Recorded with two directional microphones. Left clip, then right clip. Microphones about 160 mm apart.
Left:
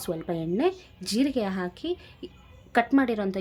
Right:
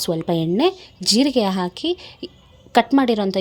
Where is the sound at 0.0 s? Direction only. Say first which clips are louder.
Right 9 dB; 40° right (ahead or behind).